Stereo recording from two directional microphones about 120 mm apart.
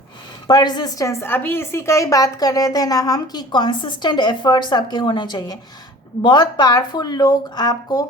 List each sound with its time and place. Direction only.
0.4 s a woman's voice: 35° left (ahead or behind)